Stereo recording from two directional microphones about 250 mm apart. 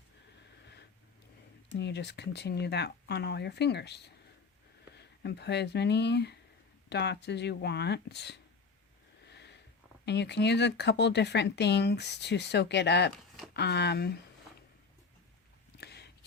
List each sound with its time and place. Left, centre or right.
1.7 s speech: left
9.3 s sniff: left
10.1 s speech: left
15.8 s a sound: left